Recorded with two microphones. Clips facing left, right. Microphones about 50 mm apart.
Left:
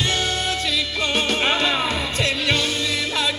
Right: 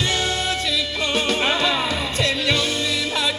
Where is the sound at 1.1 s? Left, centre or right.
Left.